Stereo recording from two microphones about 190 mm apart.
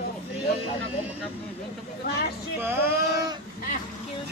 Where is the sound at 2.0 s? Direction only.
55° left (ahead or behind).